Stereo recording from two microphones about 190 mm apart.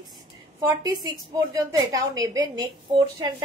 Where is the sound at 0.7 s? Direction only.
20° right (ahead or behind).